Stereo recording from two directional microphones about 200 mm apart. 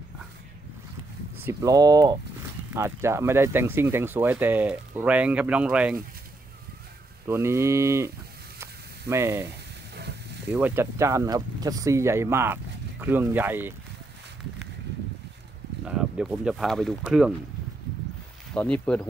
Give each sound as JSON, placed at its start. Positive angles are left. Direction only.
{"t": 1.3, "sound": "speech", "side_deg": -10}
{"t": 7.2, "sound": "speech", "side_deg": -15}
{"t": 9.1, "sound": "speech", "side_deg": -15}
{"t": 9.5, "sound": "frying", "side_deg": -55}
{"t": 10.5, "sound": "speech", "side_deg": -10}
{"t": 15.9, "sound": "speech", "side_deg": -5}
{"t": 18.5, "sound": "speech", "side_deg": 5}